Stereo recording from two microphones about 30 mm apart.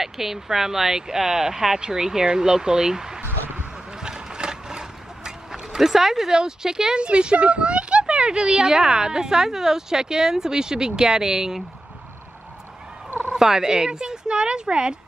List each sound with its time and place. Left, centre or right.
0.0 s speech: centre
3.9 s boat: right
5.8 s speech: centre
6.3 s speech: right
7.0 s speech: right; by 11.6 s centre
13.3 s speech: right